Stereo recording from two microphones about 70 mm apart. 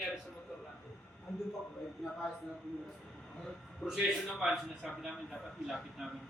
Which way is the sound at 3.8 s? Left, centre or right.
Centre.